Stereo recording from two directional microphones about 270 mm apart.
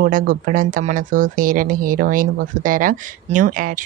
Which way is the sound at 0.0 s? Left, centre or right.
Right.